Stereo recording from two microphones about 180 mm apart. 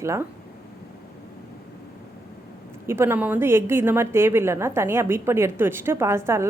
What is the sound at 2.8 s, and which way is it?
A woman's voice, 15° right (ahead or behind).